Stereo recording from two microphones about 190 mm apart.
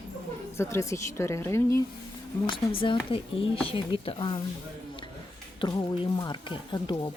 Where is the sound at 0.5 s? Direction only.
15° left (ahead or behind).